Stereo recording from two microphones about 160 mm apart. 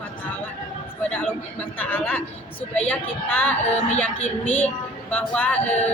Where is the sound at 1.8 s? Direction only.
10° left (ahead or behind).